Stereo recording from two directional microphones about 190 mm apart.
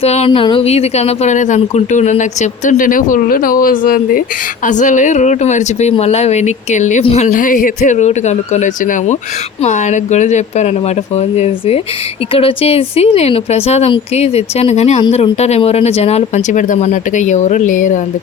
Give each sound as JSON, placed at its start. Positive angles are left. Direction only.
{"t": 0.0, "sound": "speech", "side_deg": 35}